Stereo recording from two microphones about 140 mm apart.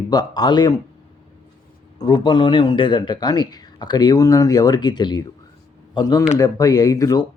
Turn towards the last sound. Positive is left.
turn(degrees=25)  # may be behind; listen again after turning